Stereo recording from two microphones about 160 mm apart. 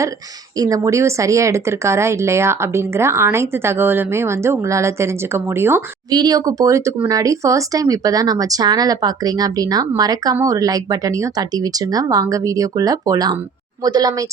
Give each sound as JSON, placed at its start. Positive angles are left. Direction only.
{"t": 0.5, "sound": "speech", "side_deg": -20}
{"t": 6.1, "sound": "speech", "side_deg": -25}